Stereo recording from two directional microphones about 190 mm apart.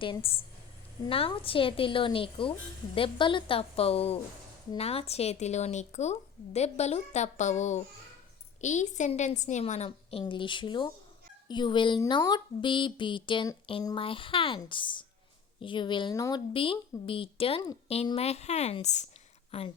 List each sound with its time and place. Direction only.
0.0 s a woman's voice: 30° left (ahead or behind)